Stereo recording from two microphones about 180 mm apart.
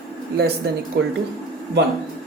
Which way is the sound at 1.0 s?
70° right (ahead or behind).